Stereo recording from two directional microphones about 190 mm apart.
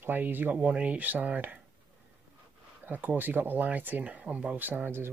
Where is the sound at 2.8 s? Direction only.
10° right (ahead or behind).